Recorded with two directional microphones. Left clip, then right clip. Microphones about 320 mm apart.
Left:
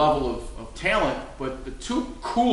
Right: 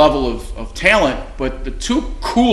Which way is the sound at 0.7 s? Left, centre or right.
Right.